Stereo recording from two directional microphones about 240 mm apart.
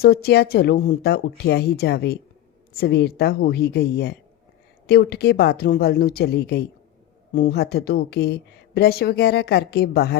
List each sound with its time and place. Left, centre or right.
0.0 s speech: left